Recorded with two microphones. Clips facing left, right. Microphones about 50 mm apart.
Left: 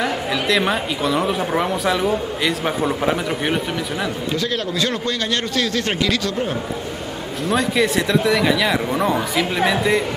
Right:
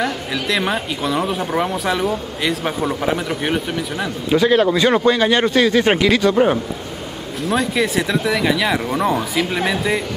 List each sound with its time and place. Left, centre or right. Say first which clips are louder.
0.0 s a woman's voice: left 1 dB; centre
4.3 s a man's voice: right 14 dB; centre
6.3 s a man's voice: right 8 dB; right
7.4 s a woman's voice: even; centre